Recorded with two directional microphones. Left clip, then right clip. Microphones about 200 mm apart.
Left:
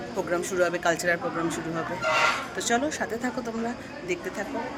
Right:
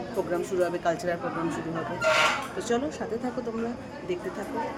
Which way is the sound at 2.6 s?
5° right (ahead or behind).